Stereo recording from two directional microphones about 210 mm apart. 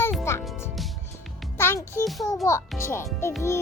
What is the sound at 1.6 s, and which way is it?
Music, 10° left (ahead or behind).